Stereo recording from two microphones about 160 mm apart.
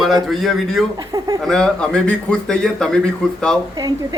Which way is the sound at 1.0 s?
25° right (ahead or behind).